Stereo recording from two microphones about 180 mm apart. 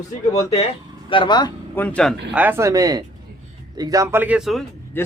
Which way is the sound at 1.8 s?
5° left (ahead or behind).